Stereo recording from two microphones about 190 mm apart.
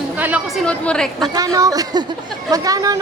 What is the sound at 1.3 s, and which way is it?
Speech, 20° right (ahead or behind).